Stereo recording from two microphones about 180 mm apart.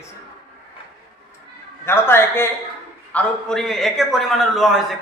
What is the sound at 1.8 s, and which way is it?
Speech, 15° left (ahead or behind).